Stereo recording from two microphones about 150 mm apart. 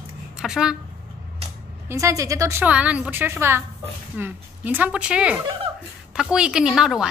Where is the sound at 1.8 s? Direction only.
20° right (ahead or behind).